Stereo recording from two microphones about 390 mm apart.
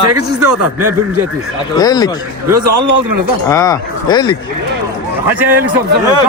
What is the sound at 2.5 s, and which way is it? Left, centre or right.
Speech, right.